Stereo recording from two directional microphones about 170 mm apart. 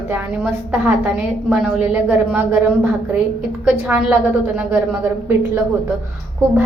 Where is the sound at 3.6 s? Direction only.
5° right (ahead or behind).